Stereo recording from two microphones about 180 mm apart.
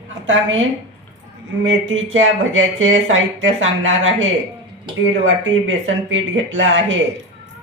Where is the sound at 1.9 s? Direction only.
90° right.